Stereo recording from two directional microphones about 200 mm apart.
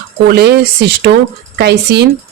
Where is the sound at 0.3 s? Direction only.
55° right (ahead or behind).